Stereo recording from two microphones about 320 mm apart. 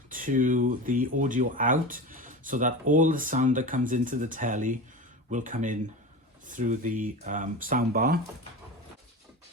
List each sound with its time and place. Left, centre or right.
0.1 s speech: right